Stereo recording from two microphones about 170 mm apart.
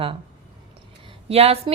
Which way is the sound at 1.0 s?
35° right (ahead or behind).